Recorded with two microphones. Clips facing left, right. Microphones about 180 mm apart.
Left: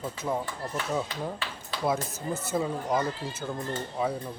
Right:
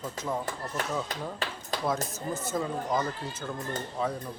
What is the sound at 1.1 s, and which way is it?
Speech, 45° right (ahead or behind).